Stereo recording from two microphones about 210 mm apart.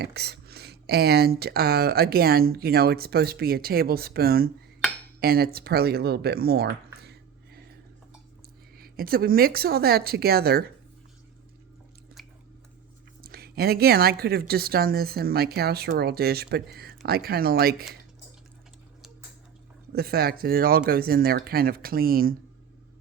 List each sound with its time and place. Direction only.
0.0 s speech: 50° right (ahead or behind)
8.8 s speech: 45° right (ahead or behind)
13.2 s speech: 45° right (ahead or behind)
19.9 s speech: 45° right (ahead or behind)